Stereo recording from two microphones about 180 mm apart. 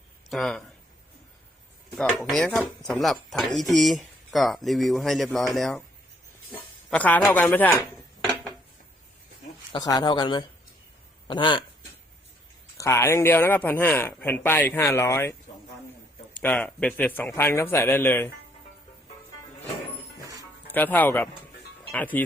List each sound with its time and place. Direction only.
0.3 s speech: centre (ahead or behind)
2.0 s speech: 5° left (ahead or behind)
6.9 s a man's voice: 10° left (ahead or behind)
8.2 s dishes: 5° left (ahead or behind)
9.7 s speech: 20° left (ahead or behind)
12.7 s a man's voice: 15° left (ahead or behind)
20.7 s a man's voice: 10° left (ahead or behind)